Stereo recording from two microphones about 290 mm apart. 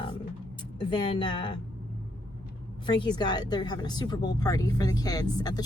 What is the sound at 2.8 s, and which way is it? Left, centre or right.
Speech, centre.